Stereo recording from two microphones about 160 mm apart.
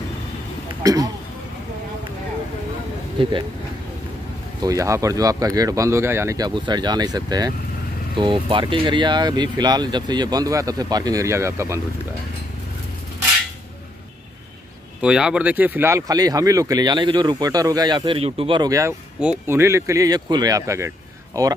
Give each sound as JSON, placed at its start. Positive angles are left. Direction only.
{"t": 0.8, "sound": "speech", "side_deg": -20}
{"t": 3.2, "sound": "speech", "side_deg": -35}
{"t": 4.6, "sound": "speech", "side_deg": -20}
{"t": 15.0, "sound": "speech", "side_deg": -5}